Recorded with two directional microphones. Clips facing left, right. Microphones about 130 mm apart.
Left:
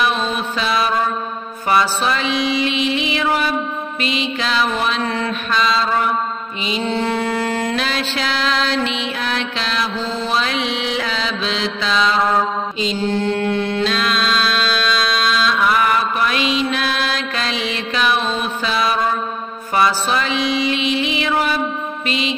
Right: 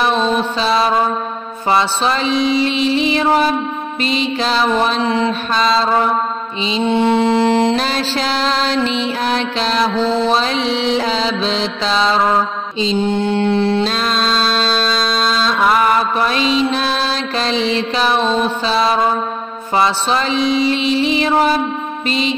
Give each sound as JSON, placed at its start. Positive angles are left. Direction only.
{"t": 0.0, "sound": "mantra", "side_deg": -35}
{"t": 5.0, "sound": "mantra", "side_deg": -20}
{"t": 5.5, "sound": "mantra", "side_deg": -35}
{"t": 6.8, "sound": "mantra", "side_deg": -20}
{"t": 7.7, "sound": "mantra", "side_deg": -35}